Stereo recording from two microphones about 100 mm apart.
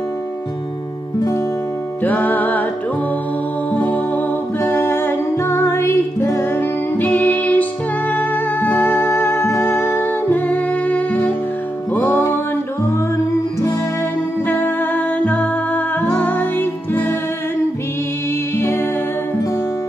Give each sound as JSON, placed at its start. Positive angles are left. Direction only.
{"t": 2.0, "sound": "music", "side_deg": 15}
{"t": 3.7, "sound": "music", "side_deg": 15}
{"t": 14.5, "sound": "music", "side_deg": 20}